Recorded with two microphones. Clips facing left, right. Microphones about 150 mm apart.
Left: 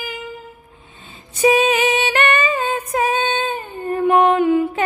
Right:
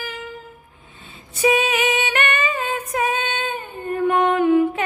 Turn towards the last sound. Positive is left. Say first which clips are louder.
# even
turn(degrees=25)  # may be behind; listen again after turning